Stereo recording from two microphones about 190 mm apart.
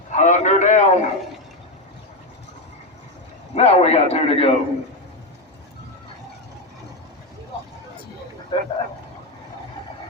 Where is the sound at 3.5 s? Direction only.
35° left (ahead or behind).